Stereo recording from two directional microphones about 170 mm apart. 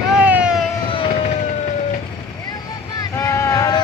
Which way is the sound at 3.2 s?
15° left (ahead or behind).